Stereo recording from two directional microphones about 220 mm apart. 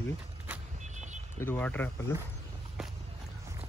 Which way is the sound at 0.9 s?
35° right (ahead or behind).